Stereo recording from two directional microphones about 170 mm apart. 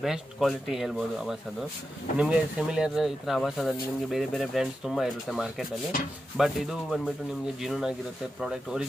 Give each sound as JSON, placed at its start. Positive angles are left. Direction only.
{"t": 0.0, "sound": "speech", "side_deg": 0}